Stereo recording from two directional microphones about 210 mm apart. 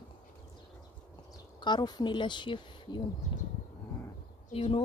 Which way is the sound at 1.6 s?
20° left (ahead or behind).